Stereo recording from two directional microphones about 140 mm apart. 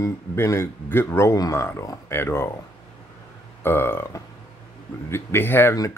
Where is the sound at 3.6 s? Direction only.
15° left (ahead or behind).